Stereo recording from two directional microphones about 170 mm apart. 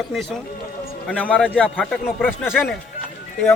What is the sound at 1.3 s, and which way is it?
A man's voice, 5° left (ahead or behind).